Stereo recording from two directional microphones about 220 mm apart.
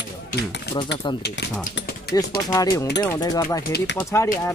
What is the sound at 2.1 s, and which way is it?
Speech, 15° left (ahead or behind).